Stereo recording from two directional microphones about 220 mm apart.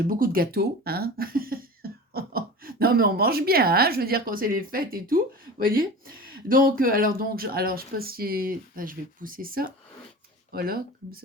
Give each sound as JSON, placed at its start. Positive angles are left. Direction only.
{"t": 0.0, "sound": "speech", "side_deg": -40}
{"t": 6.5, "sound": "speech", "side_deg": -40}